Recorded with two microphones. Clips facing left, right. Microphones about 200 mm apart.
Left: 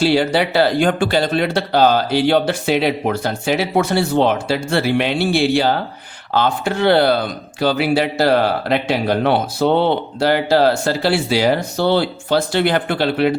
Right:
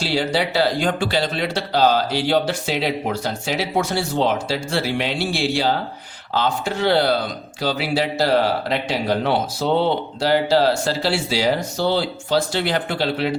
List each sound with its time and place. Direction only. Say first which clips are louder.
0.0 s speech: left 6 dB; 60° left (ahead or behind)